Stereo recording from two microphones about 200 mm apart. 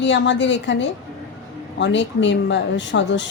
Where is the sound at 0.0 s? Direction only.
65° left (ahead or behind).